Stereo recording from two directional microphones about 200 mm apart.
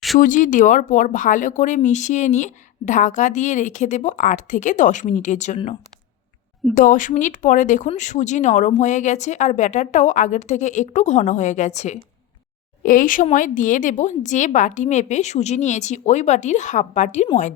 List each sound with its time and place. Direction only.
0.2 s speech: 40° left (ahead or behind)
6.7 s speech: 40° left (ahead or behind)